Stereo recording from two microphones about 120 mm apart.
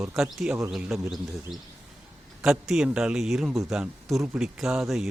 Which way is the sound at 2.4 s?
5° right (ahead or behind).